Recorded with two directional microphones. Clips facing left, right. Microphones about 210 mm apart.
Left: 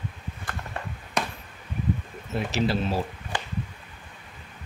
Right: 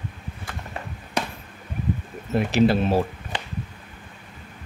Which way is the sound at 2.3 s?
55° right (ahead or behind).